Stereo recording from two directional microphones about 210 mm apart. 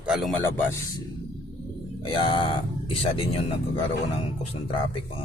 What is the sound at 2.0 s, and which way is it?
Speech, 25° left (ahead or behind).